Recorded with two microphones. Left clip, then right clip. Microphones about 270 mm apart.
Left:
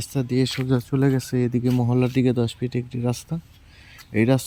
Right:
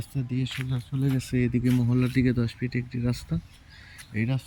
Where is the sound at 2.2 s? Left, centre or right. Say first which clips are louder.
Left 5 dB; left.